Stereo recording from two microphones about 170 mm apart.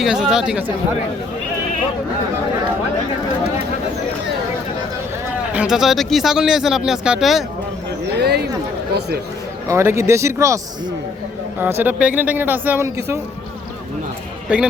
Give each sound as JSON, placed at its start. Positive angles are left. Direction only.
{"t": 0.0, "sound": "speech", "side_deg": -5}
{"t": 5.5, "sound": "speech", "side_deg": -5}
{"t": 8.0, "sound": "a sound", "side_deg": -75}
{"t": 8.9, "sound": "speech", "side_deg": -75}
{"t": 9.6, "sound": "speech", "side_deg": -15}
{"t": 11.6, "sound": "speech", "side_deg": -10}
{"t": 14.5, "sound": "speech", "side_deg": -5}